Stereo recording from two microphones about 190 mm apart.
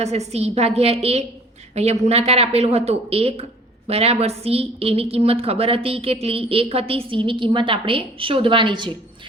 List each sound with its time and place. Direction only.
0.0 s a woman's voice: 35° right (ahead or behind)